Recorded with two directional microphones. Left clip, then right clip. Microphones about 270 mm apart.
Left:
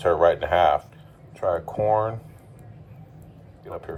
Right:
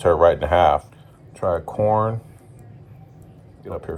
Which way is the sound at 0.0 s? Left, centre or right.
Centre.